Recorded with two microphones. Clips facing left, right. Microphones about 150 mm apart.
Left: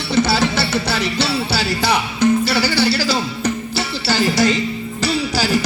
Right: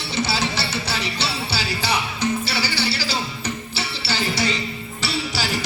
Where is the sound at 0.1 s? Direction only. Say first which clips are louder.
Left 8 dB; 50° left (ahead or behind).